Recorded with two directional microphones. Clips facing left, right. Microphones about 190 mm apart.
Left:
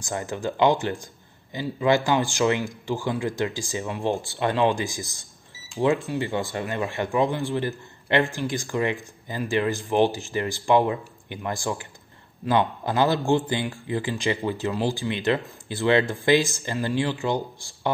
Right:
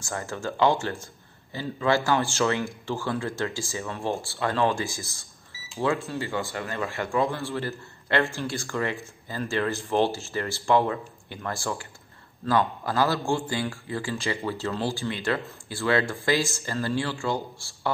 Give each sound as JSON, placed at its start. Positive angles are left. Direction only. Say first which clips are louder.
{"t": 0.0, "sound": "a man's voice", "louder": "left 3 dB", "side_deg": 15}